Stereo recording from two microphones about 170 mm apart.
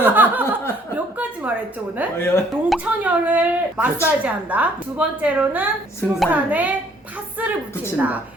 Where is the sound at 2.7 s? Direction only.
10° right (ahead or behind).